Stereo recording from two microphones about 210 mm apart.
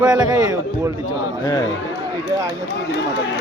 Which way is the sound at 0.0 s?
20° right (ahead or behind).